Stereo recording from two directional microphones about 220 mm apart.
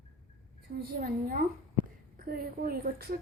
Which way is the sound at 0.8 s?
40° right (ahead or behind).